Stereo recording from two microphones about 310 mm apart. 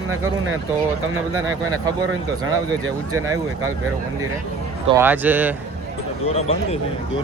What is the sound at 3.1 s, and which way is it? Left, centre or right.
Speech, centre.